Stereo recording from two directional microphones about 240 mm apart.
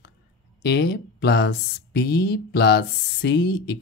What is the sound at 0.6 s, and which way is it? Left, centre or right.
Speech, left.